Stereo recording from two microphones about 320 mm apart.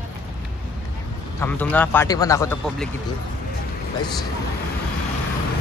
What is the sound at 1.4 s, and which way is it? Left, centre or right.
A man's voice, centre.